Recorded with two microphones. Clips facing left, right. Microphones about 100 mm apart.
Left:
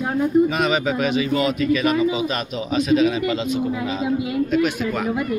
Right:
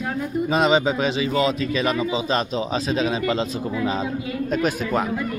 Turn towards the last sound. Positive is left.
turn(degrees=-35)  # may be behind; listen again after turning